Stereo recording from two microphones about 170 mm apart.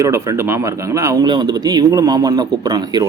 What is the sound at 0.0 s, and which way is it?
Speech, 15° right (ahead or behind).